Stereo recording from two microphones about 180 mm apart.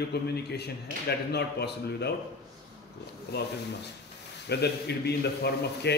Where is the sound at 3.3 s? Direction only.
65° left (ahead or behind).